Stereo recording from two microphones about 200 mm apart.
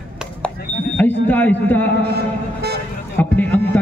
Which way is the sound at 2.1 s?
55° right (ahead or behind).